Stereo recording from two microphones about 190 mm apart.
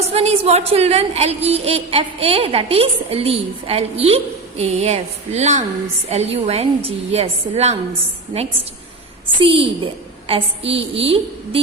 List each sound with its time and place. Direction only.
0.1 s speech: 35° right (ahead or behind)
9.4 s a woman's voice: 30° right (ahead or behind)